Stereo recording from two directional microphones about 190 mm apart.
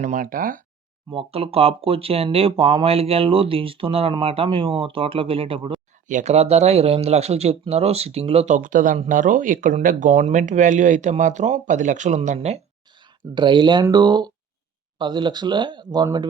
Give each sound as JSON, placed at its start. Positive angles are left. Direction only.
{"t": 0.0, "sound": "speech", "side_deg": -45}
{"t": 1.1, "sound": "speech", "side_deg": -30}
{"t": 6.1, "sound": "speech", "side_deg": -40}
{"t": 13.3, "sound": "speech", "side_deg": -25}